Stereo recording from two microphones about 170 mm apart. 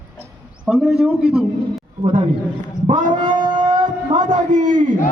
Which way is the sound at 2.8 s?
50° right (ahead or behind).